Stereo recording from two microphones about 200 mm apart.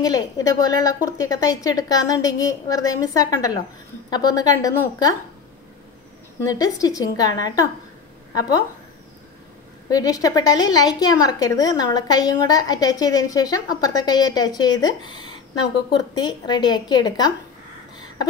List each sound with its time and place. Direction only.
0.0 s a woman's voice: 20° left (ahead or behind)
6.4 s a woman's voice: 15° left (ahead or behind)
9.8 s a woman's voice: 20° left (ahead or behind)